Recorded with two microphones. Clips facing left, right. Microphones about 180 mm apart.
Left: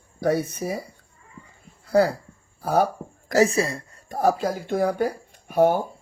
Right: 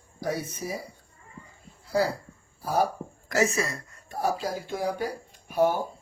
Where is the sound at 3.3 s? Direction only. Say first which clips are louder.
Left 6 dB; 35° left (ahead or behind).